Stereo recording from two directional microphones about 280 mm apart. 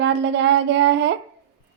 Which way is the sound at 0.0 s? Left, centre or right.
Right.